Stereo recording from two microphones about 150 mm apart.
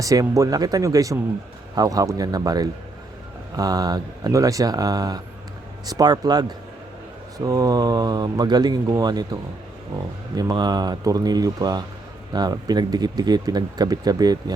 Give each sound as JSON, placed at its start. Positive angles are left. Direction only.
{"t": 0.0, "sound": "speech", "side_deg": -20}